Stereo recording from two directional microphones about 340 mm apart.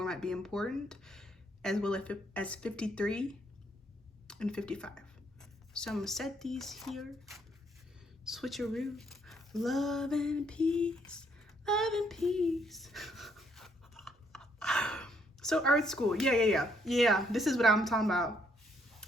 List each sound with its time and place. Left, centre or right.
0.0 s speech: centre